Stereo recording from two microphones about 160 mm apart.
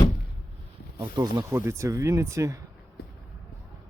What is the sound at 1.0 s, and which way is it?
Speech, 25° right (ahead or behind).